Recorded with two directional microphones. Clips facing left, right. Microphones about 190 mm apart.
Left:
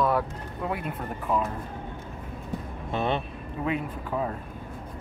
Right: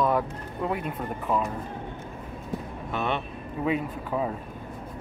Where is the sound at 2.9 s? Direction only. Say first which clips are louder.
Left 2 dB; 30° left (ahead or behind).